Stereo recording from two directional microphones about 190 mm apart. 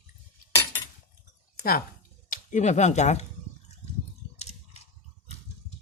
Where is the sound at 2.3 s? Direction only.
40° left (ahead or behind).